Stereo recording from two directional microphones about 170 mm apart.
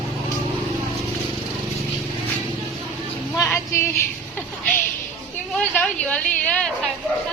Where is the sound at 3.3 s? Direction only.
15° left (ahead or behind).